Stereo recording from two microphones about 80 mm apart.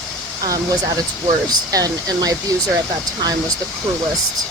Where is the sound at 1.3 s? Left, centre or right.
Right.